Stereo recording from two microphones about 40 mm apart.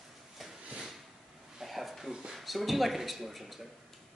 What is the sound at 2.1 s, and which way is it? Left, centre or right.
Speech, centre.